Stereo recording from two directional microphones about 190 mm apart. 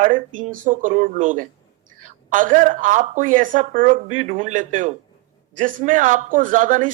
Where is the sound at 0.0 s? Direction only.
40° right (ahead or behind).